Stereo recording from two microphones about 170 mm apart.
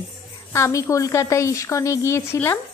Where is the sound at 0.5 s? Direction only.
15° left (ahead or behind).